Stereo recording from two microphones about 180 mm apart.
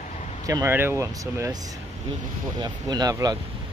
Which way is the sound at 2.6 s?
20° right (ahead or behind).